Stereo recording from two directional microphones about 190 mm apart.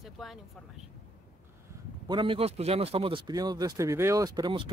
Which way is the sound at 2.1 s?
25° right (ahead or behind).